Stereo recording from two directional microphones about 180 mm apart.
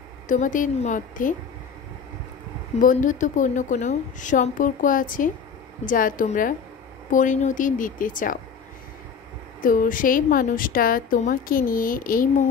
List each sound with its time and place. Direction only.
0.3 s a woman's voice: 45° left (ahead or behind)
2.8 s a woman's voice: 45° left (ahead or behind)
9.6 s a woman's voice: 50° left (ahead or behind)